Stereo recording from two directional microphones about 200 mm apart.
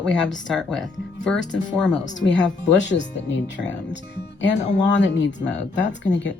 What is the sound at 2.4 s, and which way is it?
Speech, 60° left (ahead or behind).